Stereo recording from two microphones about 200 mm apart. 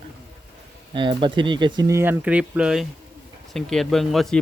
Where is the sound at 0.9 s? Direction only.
25° right (ahead or behind).